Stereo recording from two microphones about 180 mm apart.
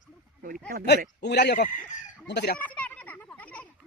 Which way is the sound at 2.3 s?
70° left (ahead or behind).